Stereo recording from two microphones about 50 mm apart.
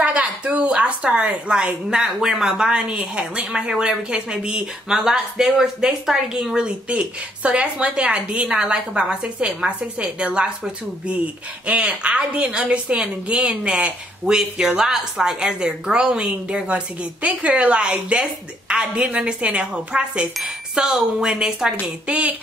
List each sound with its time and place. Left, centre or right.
0.0 s a sound: right
2.1 s a woman's voice: centre
22.0 s a woman's voice: right